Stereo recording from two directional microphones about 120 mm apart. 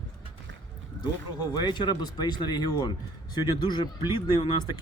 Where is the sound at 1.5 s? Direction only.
40° left (ahead or behind).